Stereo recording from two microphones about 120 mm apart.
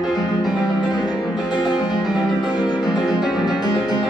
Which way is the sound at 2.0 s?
Centre (ahead or behind).